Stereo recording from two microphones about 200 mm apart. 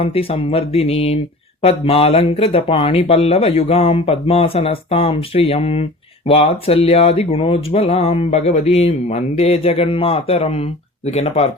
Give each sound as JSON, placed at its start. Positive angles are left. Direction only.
{"t": 0.0, "sound": "speech", "side_deg": 30}